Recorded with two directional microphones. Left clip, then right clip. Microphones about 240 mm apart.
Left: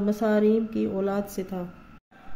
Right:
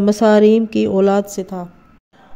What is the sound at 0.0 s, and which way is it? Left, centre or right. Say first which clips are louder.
A woman's voice: right 12 dB; right.